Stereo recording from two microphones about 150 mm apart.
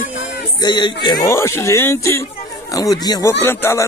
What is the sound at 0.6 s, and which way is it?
Speech, 30° left (ahead or behind).